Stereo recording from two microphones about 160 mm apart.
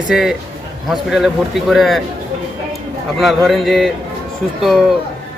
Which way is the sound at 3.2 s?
Centre (ahead or behind).